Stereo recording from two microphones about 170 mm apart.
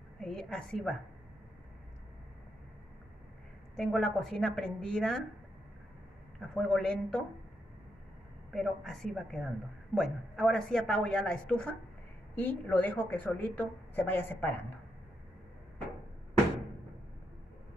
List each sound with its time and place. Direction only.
0.2 s speech: 5° left (ahead or behind)
3.7 s speech: 5° left (ahead or behind)
6.4 s speech: 5° left (ahead or behind)
8.5 s a woman's voice: centre (ahead or behind)